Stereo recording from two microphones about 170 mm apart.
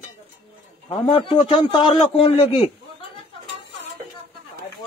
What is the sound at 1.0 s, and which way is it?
A man's voice, 30° left (ahead or behind).